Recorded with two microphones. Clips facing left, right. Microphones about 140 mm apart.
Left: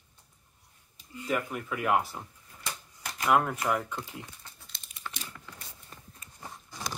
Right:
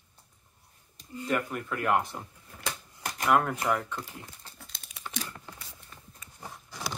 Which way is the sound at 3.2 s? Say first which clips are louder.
Even; centre (ahead or behind).